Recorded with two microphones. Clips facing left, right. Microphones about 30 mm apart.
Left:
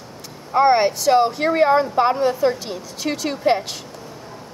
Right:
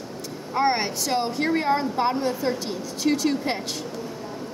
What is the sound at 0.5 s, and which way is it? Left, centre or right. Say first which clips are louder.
A woman's voice: left 8 dB; centre.